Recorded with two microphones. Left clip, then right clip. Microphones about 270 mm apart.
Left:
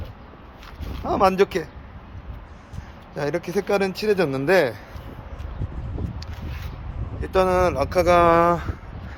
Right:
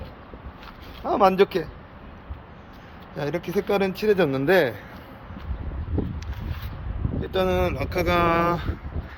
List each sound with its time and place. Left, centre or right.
1.0 s speech: centre
3.2 s speech: centre
7.2 s speech: centre